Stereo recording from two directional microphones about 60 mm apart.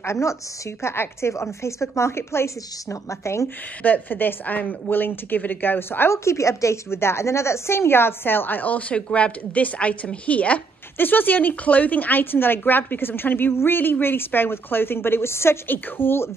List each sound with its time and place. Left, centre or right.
0.0 s a woman's voice: left
3.8 s speech: left